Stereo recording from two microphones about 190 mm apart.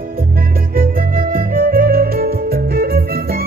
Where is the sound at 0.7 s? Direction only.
50° right (ahead or behind).